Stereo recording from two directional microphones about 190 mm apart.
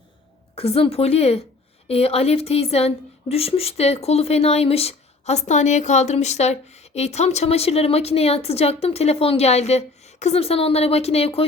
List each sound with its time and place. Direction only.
0.5 s a woman's voice: 30° left (ahead or behind)